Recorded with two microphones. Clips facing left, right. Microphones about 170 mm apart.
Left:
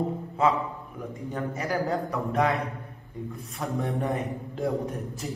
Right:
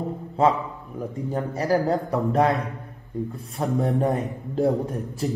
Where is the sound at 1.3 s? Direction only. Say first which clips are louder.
Right 6 dB; 35° right (ahead or behind).